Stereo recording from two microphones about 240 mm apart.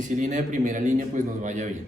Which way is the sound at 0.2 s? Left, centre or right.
Right.